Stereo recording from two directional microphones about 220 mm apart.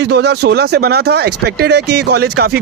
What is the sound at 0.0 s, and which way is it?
Speech, 50° right (ahead or behind).